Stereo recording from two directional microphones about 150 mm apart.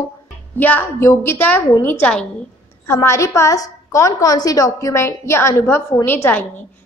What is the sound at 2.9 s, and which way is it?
A woman's voice, 20° left (ahead or behind).